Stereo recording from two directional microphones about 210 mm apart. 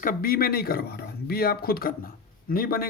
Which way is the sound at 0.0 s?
40° left (ahead or behind).